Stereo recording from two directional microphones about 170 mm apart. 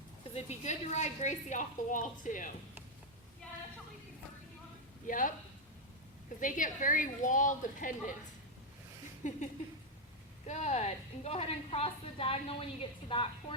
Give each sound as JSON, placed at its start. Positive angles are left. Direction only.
{"t": 0.3, "sound": "a woman's voice", "side_deg": 40}
{"t": 5.0, "sound": "a woman's voice", "side_deg": 50}
{"t": 6.4, "sound": "a woman's voice", "side_deg": 50}
{"t": 9.2, "sound": "a woman's voice", "side_deg": 45}
{"t": 10.4, "sound": "a woman's voice", "side_deg": 45}